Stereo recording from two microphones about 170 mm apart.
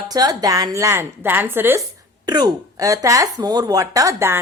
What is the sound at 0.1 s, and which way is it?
Speech, 20° right (ahead or behind).